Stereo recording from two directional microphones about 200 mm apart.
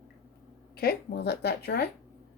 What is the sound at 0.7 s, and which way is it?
Speech, 50° left (ahead or behind).